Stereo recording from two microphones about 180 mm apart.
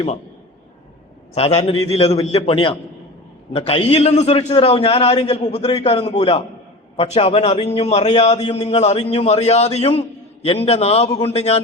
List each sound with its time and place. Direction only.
1.3 s a man's voice: 35° left (ahead or behind)